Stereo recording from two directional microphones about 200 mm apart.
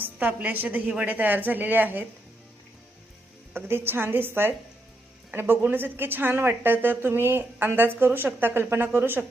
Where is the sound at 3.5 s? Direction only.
10° right (ahead or behind).